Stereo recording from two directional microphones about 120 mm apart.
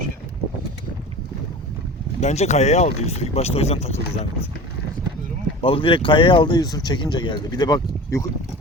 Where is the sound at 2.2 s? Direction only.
70° left (ahead or behind).